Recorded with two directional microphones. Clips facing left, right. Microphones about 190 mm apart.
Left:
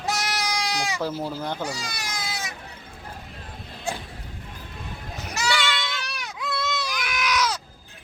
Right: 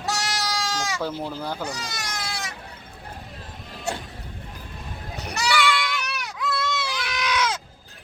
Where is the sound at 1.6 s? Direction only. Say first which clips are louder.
Left 1 dB; 10° left (ahead or behind).